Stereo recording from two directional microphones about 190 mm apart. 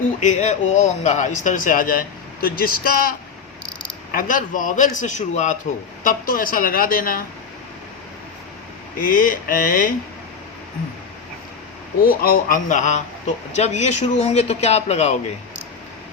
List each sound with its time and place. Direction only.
0.2 s speech: 40° left (ahead or behind)
9.0 s speech: 50° left (ahead or behind)
12.0 s speech: 50° left (ahead or behind)